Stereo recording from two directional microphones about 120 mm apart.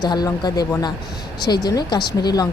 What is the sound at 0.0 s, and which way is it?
Speech, 35° left (ahead or behind).